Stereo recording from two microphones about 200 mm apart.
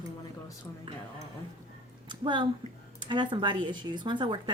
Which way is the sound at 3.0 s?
25° right (ahead or behind).